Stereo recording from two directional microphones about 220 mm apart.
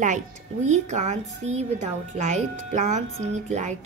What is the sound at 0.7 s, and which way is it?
A woman's voice, 35° right (ahead or behind).